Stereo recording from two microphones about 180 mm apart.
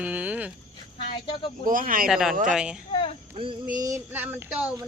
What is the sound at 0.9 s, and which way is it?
Speech, 30° left (ahead or behind).